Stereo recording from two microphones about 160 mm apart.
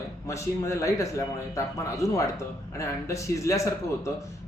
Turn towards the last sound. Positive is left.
turn(degrees=20)  # may be behind; listen again after turning